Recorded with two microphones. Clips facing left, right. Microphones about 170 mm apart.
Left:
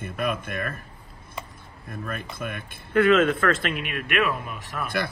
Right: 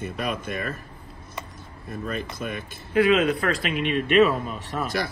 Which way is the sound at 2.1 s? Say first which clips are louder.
Right 2 dB; 55° left (ahead or behind).